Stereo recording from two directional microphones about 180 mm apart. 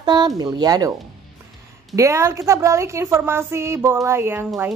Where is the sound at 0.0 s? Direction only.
25° right (ahead or behind).